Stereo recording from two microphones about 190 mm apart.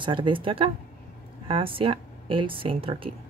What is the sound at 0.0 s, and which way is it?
A woman's voice, 25° right (ahead or behind).